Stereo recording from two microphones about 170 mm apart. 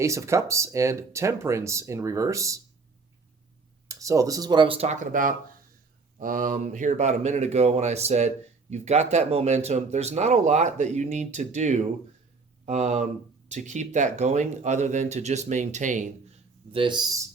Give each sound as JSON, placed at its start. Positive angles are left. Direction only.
{"t": 0.0, "sound": "speech", "side_deg": -15}
{"t": 3.8, "sound": "speech", "side_deg": -20}
{"t": 16.7, "sound": "speech", "side_deg": -25}